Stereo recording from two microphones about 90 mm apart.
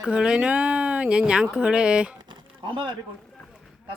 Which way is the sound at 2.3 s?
65° right (ahead or behind).